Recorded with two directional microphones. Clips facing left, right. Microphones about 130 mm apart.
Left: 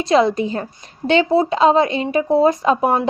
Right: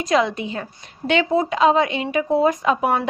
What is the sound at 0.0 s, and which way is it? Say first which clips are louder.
Speech: left 4 dB; 35° left (ahead or behind).